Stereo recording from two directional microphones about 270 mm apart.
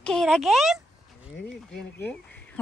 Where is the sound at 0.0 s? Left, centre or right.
Centre.